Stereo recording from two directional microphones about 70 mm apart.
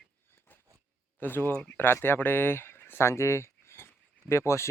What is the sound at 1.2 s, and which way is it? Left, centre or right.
Speech, left.